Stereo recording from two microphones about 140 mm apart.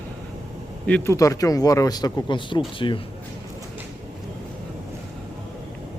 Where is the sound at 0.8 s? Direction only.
10° left (ahead or behind).